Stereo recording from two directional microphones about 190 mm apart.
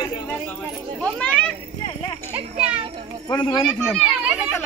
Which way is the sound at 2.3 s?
5° right (ahead or behind).